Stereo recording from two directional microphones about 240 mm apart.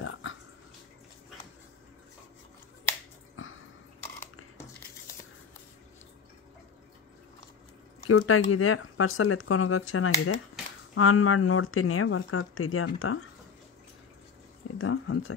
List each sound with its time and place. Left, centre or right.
0.0 s dog: left
8.1 s speech: left
14.8 s speech: left